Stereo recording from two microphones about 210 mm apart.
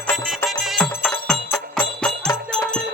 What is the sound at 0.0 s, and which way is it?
Music, 10° left (ahead or behind).